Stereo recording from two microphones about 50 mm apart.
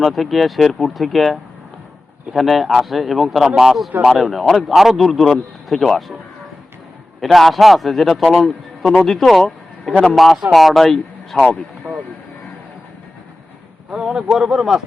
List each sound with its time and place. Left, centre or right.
0.0 s a man's voice: centre
7.3 s a man's voice: centre
11.3 s speech: centre
11.9 s speech: right
13.9 s a man's voice: centre